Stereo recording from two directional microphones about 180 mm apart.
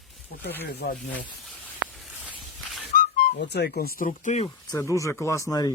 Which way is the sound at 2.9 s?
65° left (ahead or behind).